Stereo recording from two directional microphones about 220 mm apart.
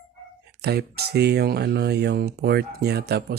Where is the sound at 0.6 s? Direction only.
45° right (ahead or behind).